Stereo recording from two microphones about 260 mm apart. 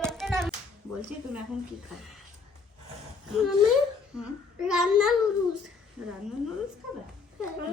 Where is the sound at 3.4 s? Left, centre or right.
Centre.